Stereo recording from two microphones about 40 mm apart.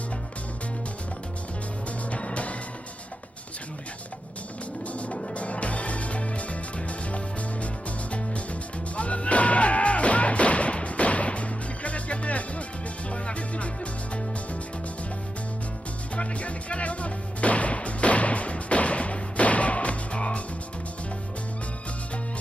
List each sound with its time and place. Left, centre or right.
2.0 s music: left
5.1 s music: left
16.1 s music: left